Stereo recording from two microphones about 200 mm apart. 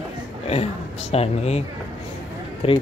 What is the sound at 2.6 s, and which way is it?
Speech, 30° left (ahead or behind).